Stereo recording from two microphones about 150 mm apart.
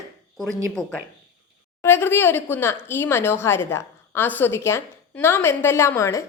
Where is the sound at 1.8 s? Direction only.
15° left (ahead or behind).